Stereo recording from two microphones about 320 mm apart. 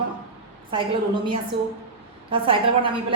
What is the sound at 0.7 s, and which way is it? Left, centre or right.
Speech, centre.